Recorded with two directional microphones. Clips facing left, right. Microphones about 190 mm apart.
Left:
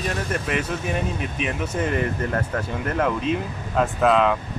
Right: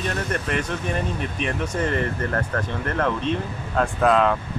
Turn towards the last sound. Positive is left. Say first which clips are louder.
# even
turn(degrees=0)  # may be behind; listen again after turning